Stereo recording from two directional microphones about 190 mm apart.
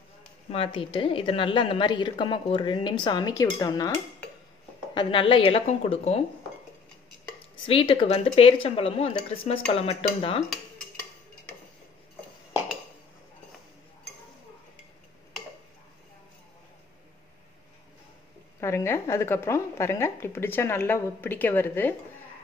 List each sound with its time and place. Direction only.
0.5 s a woman's voice: 30° left (ahead or behind)
7.6 s a woman's voice: 30° left (ahead or behind)
18.6 s a woman's voice: 15° left (ahead or behind)